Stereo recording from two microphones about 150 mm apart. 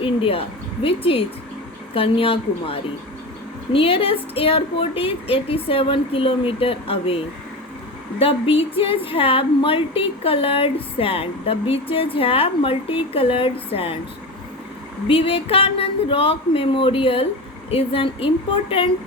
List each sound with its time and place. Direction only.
0.0 s speech: 35° left (ahead or behind)
8.2 s speech: 40° left (ahead or behind)
15.0 s speech: 35° left (ahead or behind)